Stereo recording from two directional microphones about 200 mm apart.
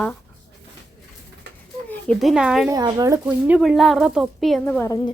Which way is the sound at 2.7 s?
20° right (ahead or behind).